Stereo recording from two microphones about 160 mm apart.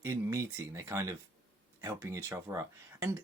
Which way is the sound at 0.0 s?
15° right (ahead or behind).